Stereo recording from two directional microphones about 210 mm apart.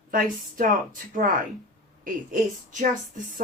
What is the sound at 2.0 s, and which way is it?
Speech, 40° right (ahead or behind).